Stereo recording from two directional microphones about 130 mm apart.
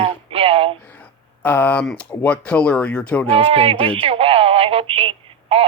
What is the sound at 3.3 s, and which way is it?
Speech, 45° right (ahead or behind).